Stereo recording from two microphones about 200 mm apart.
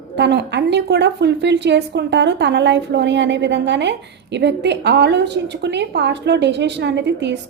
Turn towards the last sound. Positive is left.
turn(degrees=-60)  # may be behind; listen again after turning